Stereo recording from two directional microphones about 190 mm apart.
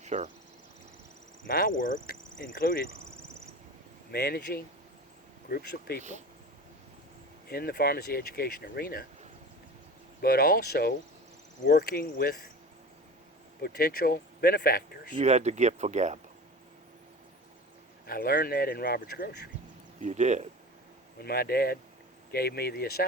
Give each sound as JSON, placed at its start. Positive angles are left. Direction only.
{"t": 0.0, "sound": "cricket", "side_deg": -35}
{"t": 1.5, "sound": "speech", "side_deg": 50}
{"t": 4.1, "sound": "speech", "side_deg": 55}
{"t": 6.0, "sound": "speech", "side_deg": -40}
{"t": 7.4, "sound": "speech", "side_deg": 55}
{"t": 10.2, "sound": "speech", "side_deg": 55}
{"t": 13.6, "sound": "speech", "side_deg": 55}
{"t": 15.1, "sound": "speech", "side_deg": -35}
{"t": 18.0, "sound": "speech", "side_deg": 55}
{"t": 20.0, "sound": "speech", "side_deg": -40}
{"t": 21.2, "sound": "speech", "side_deg": 55}